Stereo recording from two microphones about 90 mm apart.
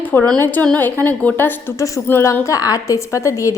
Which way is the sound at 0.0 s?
20° left (ahead or behind).